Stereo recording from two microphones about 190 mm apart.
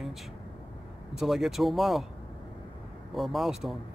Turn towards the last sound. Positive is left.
turn(degrees=0)  # may be behind; listen again after turning